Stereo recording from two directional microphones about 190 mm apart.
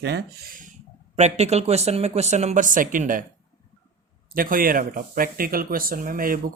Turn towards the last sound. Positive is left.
turn(degrees=-45)  # may be behind; listen again after turning